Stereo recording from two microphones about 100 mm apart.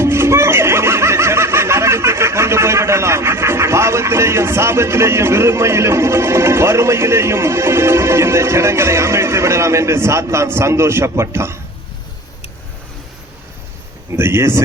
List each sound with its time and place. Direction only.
0.0 s speech: 25° right (ahead or behind)
14.1 s speech: 25° right (ahead or behind)